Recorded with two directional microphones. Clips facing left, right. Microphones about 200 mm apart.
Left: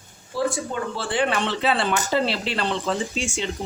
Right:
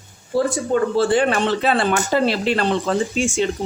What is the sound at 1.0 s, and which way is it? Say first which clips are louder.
Speech: right 4 dB; 45° right (ahead or behind).